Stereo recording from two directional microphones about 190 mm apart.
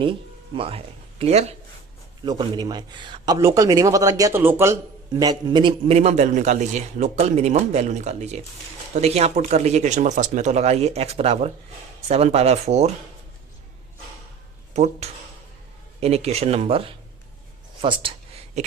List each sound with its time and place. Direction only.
0.0 s speech: 25° right (ahead or behind)
2.2 s speech: 20° right (ahead or behind)
14.7 s speech: 35° right (ahead or behind)